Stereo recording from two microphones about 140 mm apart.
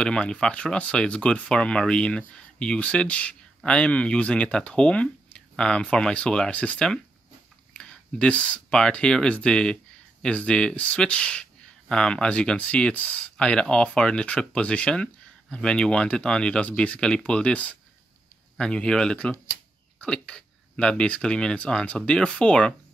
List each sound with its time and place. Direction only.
0.0 s speech: 5° left (ahead or behind)